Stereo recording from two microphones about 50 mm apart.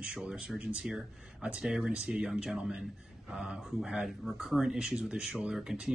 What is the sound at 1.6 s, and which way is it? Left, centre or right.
Speech, centre.